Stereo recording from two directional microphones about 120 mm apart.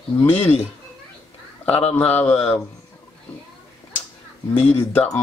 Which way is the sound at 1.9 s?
15° left (ahead or behind).